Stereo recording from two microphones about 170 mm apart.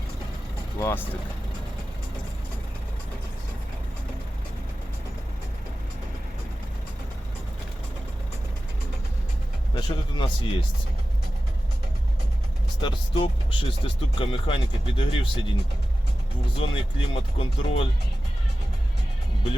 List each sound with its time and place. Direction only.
0.8 s speech: 15° left (ahead or behind)
9.7 s speech: 30° left (ahead or behind)
12.8 s speech: 30° left (ahead or behind)
16.6 s speech: 30° left (ahead or behind)